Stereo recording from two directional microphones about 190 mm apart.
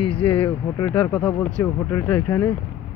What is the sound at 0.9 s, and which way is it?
Speech, 5° left (ahead or behind).